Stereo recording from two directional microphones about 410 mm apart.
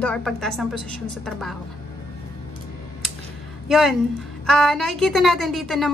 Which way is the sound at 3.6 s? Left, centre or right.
Centre.